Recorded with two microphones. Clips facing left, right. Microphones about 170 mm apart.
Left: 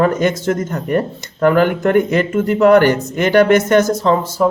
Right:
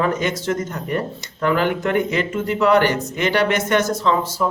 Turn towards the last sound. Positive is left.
turn(degrees=45)  # may be behind; listen again after turning